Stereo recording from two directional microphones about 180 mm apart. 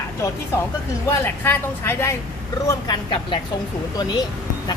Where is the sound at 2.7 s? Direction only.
25° left (ahead or behind).